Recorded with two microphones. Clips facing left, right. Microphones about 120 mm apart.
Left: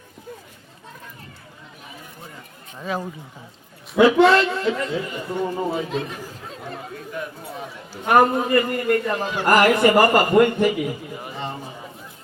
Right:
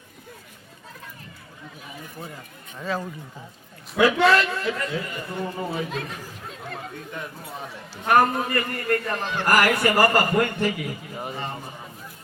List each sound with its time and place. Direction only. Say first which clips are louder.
2.7 s speech: left 1 dB; 10° left (ahead or behind)
3.9 s a man's voice: left 4 dB; 25° left (ahead or behind)
8.0 s a man's voice: left 3 dB; 20° left (ahead or behind)